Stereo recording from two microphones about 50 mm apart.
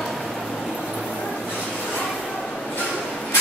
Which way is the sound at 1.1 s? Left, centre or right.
Centre.